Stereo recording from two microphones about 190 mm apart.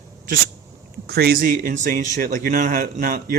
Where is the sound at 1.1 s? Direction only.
55° right (ahead or behind).